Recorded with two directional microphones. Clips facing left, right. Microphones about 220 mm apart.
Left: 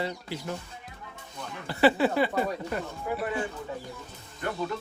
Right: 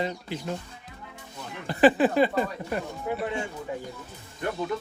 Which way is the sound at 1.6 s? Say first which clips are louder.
Right 3 dB; 15° right (ahead or behind).